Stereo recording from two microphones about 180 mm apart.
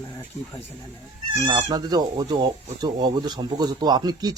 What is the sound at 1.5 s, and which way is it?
Speech, 25° right (ahead or behind).